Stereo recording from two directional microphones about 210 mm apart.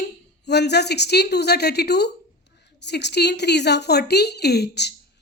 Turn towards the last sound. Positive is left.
turn(degrees=50)  # may be behind; listen again after turning